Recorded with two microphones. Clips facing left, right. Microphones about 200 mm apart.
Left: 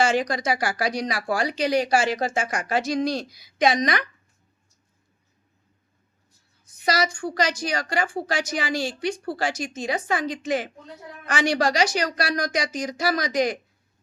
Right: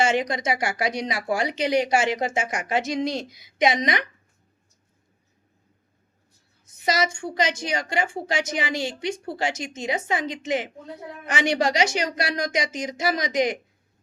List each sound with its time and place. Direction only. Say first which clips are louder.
0.0 s speech: left 1 dB; 25° right (ahead or behind)
6.7 s speech: even; 20° right (ahead or behind)